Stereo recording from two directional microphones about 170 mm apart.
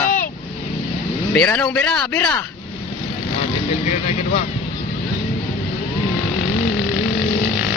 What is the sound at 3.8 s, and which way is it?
Speech, 40° left (ahead or behind).